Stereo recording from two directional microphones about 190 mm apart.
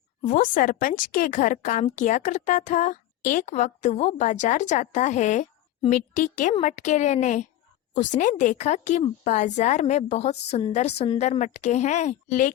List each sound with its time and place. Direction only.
0.2 s a woman's voice: 45° left (ahead or behind)